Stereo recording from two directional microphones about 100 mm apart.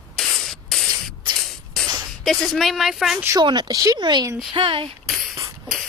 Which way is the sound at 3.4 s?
45° right (ahead or behind).